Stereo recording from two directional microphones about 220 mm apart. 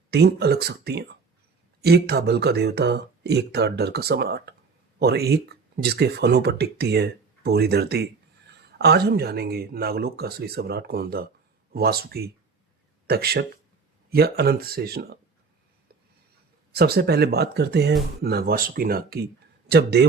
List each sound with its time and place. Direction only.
0.1 s speech: 50° right (ahead or behind)
16.7 s speech: 45° right (ahead or behind)